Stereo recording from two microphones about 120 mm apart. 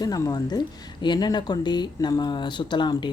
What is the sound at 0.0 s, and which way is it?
Speech, 35° left (ahead or behind).